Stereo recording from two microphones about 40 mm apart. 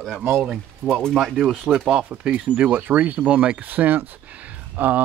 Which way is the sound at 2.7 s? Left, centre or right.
Right.